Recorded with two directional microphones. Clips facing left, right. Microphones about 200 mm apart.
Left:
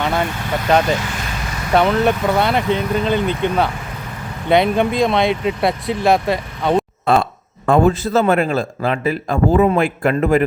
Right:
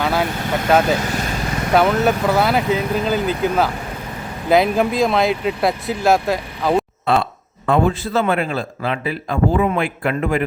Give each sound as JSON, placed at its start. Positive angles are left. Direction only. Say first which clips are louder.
{"t": 0.0, "sound": "vehicle", "louder": "even", "side_deg": -5}
{"t": 0.7, "sound": "speech", "louder": "even", "side_deg": -5}
{"t": 1.0, "sound": "vehicle", "louder": "right 4 dB", "side_deg": -40}
{"t": 1.7, "sound": "speech", "louder": "left 1 dB", "side_deg": -5}
{"t": 7.0, "sound": "a man's voice", "louder": "left 2 dB", "side_deg": 45}